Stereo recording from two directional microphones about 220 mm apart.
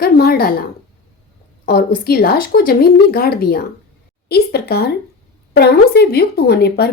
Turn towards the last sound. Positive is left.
turn(degrees=45)  # may be behind; listen again after turning